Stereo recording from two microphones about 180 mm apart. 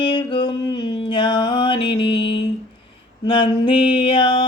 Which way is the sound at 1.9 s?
25° left (ahead or behind).